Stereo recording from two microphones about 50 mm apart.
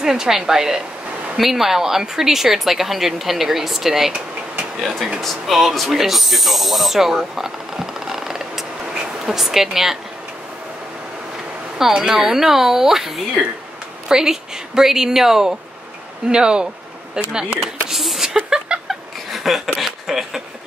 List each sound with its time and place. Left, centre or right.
0.0 s speech: centre
5.2 s speech: centre
11.8 s speech: centre
17.8 s a sound: centre